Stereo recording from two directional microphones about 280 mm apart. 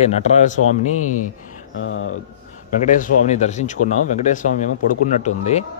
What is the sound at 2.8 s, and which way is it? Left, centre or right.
Speech, left.